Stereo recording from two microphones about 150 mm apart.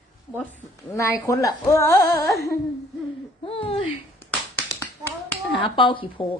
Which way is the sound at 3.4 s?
40° left (ahead or behind).